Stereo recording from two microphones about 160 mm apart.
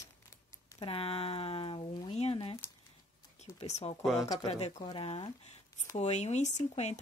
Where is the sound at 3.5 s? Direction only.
40° left (ahead or behind).